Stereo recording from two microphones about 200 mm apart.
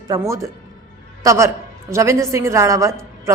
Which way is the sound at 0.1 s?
15° right (ahead or behind).